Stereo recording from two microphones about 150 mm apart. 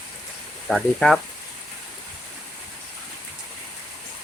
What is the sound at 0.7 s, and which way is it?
Speech, 5° left (ahead or behind).